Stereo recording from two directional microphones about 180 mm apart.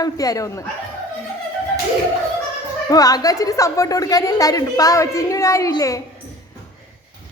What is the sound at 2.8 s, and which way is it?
A woman's voice, 20° left (ahead or behind).